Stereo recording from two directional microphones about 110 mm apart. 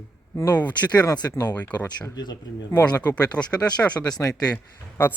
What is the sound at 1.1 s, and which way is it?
Speech, 35° left (ahead or behind).